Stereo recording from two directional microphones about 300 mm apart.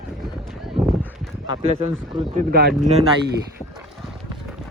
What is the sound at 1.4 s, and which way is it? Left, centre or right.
Speech, centre.